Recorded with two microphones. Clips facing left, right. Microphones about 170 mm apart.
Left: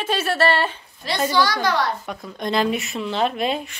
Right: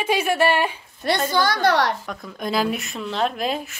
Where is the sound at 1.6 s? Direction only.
70° right (ahead or behind).